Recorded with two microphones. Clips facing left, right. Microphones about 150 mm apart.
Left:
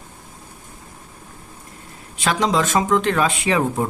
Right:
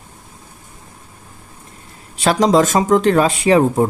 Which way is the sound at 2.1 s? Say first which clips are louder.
Right 6 dB; 35° right (ahead or behind).